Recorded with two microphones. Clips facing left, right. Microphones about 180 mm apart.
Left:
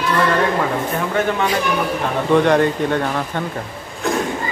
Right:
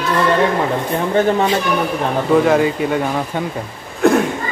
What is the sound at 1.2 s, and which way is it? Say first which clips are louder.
Speech: right 5 dB; 30° right (ahead or behind).